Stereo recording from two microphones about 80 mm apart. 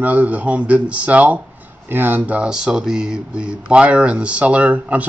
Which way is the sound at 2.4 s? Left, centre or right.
Centre.